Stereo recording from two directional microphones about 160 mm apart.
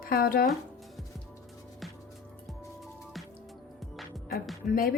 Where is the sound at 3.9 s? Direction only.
Centre (ahead or behind).